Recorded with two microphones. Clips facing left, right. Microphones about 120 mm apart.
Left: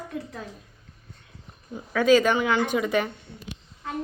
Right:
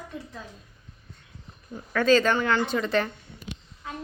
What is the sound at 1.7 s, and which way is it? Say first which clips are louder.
A woman's voice: left 2 dB; 10° left (ahead or behind).